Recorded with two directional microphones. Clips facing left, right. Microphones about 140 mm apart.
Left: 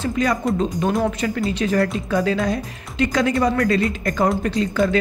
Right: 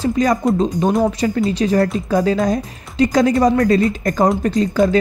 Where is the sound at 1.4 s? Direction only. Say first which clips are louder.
Right 2 dB; 30° right (ahead or behind).